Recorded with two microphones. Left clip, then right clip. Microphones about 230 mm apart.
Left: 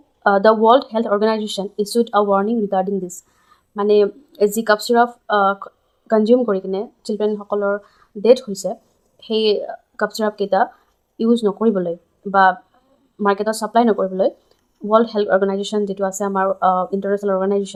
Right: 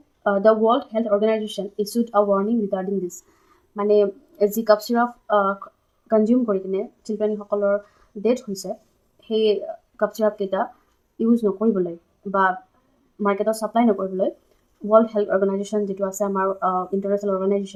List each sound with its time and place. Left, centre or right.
0.2 s speech: left